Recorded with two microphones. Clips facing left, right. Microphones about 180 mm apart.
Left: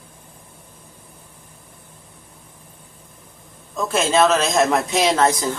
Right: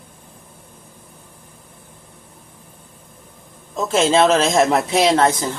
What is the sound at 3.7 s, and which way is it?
A man's voice, 25° right (ahead or behind).